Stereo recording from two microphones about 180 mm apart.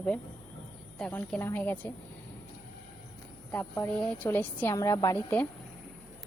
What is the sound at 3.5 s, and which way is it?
A woman's voice, 10° left (ahead or behind).